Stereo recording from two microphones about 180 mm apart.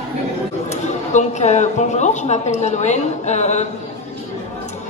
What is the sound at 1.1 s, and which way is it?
A woman's voice, 40° left (ahead or behind).